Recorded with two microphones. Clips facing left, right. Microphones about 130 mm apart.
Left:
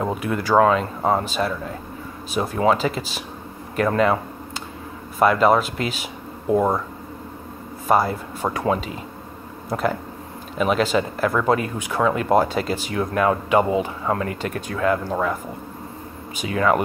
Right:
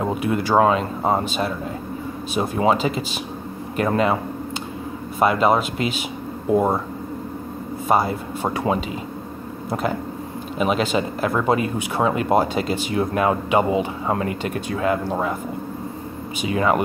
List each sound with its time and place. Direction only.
0.2 s speech: 25° right (ahead or behind)
5.2 s speech: 15° right (ahead or behind)
7.9 s speech: 25° right (ahead or behind)
10.6 s speech: 20° right (ahead or behind)
12.4 s speech: 20° right (ahead or behind)
16.4 s speech: 15° right (ahead or behind)